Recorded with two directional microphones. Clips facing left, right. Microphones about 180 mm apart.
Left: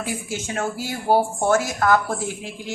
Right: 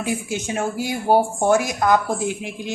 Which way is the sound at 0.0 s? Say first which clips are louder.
Right 4 dB; 15° right (ahead or behind).